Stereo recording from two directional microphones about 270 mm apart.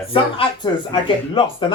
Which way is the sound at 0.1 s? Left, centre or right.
Centre.